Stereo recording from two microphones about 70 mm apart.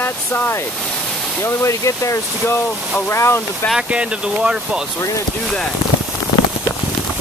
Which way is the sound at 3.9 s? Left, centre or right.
Centre.